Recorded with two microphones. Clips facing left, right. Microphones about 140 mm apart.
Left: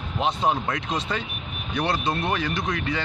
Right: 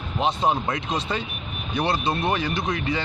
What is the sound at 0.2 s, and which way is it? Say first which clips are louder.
Speech: right 1 dB; 25° right (ahead or behind).